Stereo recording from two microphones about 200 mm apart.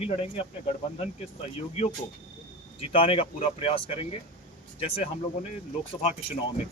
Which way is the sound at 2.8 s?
25° left (ahead or behind).